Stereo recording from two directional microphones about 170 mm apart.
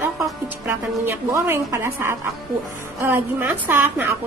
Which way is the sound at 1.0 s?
15° right (ahead or behind).